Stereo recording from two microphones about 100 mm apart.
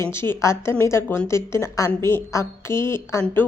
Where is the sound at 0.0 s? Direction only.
25° left (ahead or behind).